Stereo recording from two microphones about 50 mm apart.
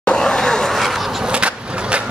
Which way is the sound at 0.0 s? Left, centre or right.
Centre.